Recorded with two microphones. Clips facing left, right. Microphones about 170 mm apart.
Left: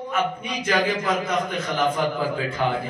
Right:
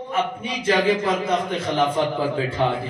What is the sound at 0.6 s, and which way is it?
Mantra, 30° right (ahead or behind).